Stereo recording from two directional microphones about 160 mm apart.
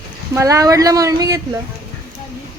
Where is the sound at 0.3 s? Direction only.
20° right (ahead or behind).